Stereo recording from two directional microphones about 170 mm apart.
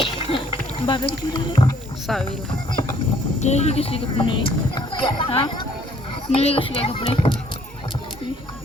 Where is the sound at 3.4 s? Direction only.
40° left (ahead or behind).